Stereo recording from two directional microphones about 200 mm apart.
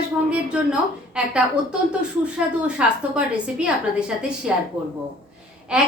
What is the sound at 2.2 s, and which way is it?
Speech, 5° right (ahead or behind).